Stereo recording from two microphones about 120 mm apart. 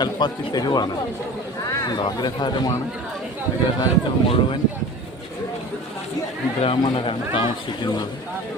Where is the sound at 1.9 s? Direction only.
35° left (ahead or behind).